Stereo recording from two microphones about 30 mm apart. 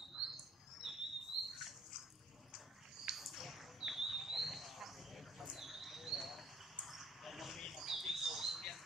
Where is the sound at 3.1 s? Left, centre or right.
Centre.